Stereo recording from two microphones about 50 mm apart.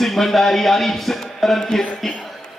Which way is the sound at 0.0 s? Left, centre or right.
Centre.